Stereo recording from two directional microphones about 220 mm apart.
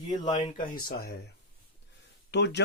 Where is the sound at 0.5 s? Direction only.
40° left (ahead or behind).